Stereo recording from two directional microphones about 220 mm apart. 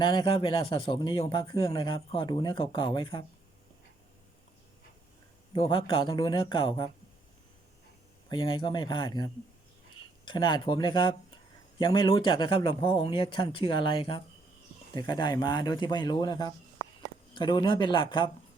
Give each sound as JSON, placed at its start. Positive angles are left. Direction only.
{"t": 0.0, "sound": "speech", "side_deg": 20}
{"t": 5.5, "sound": "speech", "side_deg": 25}
{"t": 8.3, "sound": "speech", "side_deg": 20}